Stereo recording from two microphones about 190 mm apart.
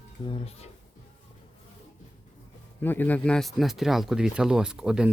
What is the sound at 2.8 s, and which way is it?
Speech, 10° left (ahead or behind).